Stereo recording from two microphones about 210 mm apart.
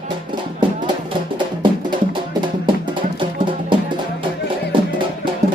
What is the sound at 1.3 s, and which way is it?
Music, 20° right (ahead or behind).